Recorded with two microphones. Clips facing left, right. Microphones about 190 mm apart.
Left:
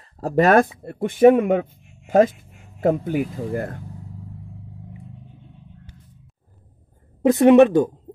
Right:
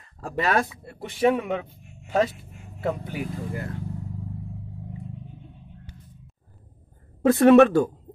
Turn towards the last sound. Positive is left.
turn(degrees=15)  # may be behind; listen again after turning